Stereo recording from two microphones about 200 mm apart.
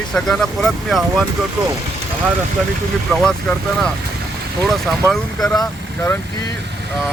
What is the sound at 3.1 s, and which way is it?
Speech, 5° left (ahead or behind).